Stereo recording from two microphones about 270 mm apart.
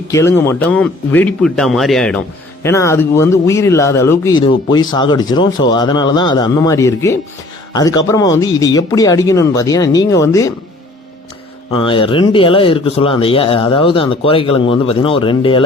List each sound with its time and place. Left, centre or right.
0.1 s speech: centre
11.8 s speech: centre